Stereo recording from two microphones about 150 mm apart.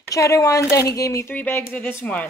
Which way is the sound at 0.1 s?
20° left (ahead or behind).